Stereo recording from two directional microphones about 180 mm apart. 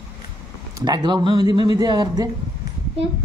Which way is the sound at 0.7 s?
25° right (ahead or behind).